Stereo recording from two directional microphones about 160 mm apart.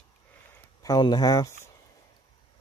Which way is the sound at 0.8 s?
25° left (ahead or behind).